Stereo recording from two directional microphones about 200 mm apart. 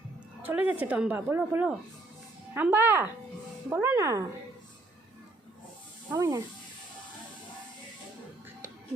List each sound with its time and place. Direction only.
0.4 s a woman's voice: 10° right (ahead or behind)
6.1 s a woman's voice: 15° right (ahead or behind)